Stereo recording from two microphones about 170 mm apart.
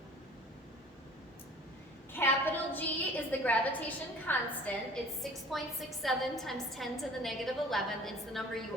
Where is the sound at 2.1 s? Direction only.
10° left (ahead or behind).